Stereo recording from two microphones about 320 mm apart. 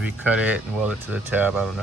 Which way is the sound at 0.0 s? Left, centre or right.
Centre.